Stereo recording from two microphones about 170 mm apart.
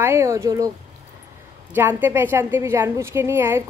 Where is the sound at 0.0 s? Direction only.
15° right (ahead or behind).